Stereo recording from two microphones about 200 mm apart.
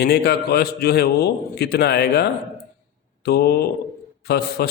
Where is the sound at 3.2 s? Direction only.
55° left (ahead or behind).